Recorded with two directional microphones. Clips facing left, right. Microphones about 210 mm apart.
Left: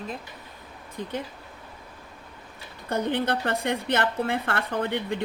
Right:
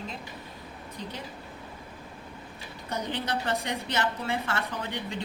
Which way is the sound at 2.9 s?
55° left (ahead or behind).